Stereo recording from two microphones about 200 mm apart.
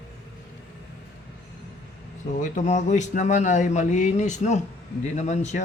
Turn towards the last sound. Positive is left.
turn(degrees=35)  # may be behind; listen again after turning